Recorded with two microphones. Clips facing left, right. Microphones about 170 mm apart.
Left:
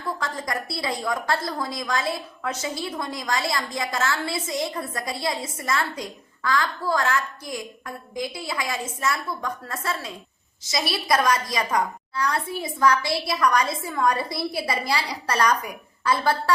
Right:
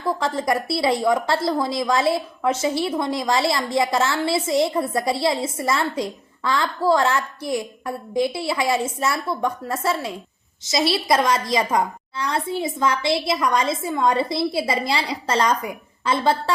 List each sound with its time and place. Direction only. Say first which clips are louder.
0.2 s a woman's voice: right 7 dB; 25° right (ahead or behind)